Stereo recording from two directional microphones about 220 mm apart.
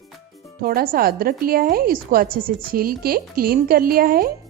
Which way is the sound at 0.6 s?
40° right (ahead or behind).